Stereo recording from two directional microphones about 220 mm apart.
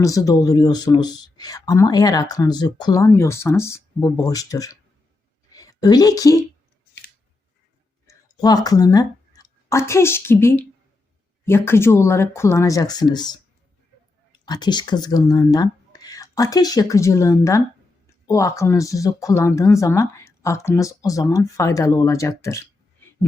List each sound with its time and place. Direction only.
0.0 s speech: 15° left (ahead or behind)
5.5 s a sound: 15° left (ahead or behind)
8.0 s speech: 15° left (ahead or behind)
14.4 s speech: 20° left (ahead or behind)